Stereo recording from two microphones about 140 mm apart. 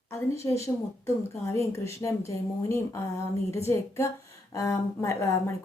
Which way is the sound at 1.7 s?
20° left (ahead or behind).